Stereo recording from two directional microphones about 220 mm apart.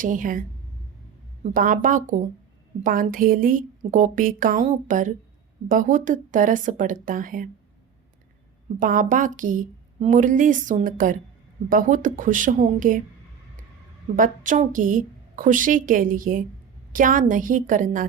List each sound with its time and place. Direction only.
0.0 s a woman's voice: 35° right (ahead or behind)
1.5 s a woman's voice: 40° right (ahead or behind)
8.8 s a woman's voice: 35° right (ahead or behind)
14.2 s a woman's voice: 35° right (ahead or behind)